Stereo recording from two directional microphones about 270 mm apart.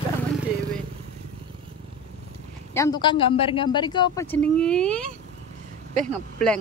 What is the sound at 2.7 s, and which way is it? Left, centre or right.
A woman's voice, centre.